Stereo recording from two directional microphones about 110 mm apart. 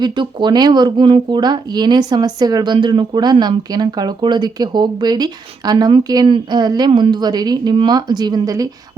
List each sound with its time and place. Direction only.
0.0 s speech: 45° right (ahead or behind)